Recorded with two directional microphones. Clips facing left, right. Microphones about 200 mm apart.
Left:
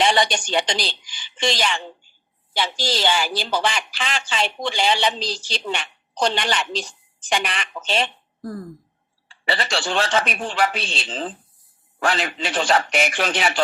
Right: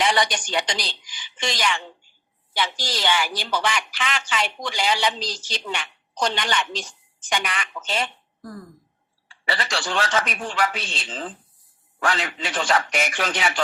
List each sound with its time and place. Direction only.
0.0 s speech: 25° left (ahead or behind)
8.4 s speech: 50° left (ahead or behind)
9.3 s speech: 25° left (ahead or behind)